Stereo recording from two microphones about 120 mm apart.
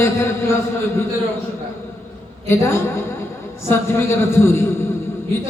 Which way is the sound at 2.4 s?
20° left (ahead or behind).